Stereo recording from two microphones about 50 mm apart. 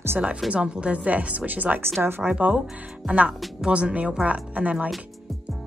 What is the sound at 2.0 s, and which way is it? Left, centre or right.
Speech, right.